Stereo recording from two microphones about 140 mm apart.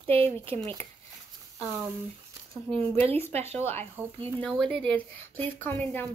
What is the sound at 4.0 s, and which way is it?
Speech, 15° right (ahead or behind).